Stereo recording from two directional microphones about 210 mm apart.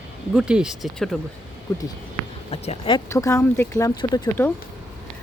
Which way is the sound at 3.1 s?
15° left (ahead or behind).